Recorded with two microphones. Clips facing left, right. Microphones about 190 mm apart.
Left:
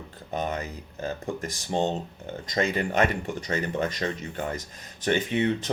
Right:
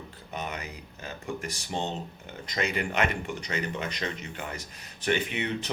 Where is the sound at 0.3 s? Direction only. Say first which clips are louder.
Left 6 dB; 45° left (ahead or behind).